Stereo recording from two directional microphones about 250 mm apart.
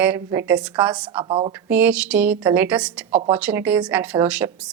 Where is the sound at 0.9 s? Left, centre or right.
Centre.